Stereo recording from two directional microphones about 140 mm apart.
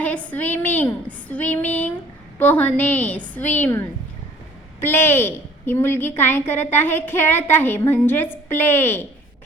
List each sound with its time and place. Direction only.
0.0 s a woman's voice: 10° left (ahead or behind)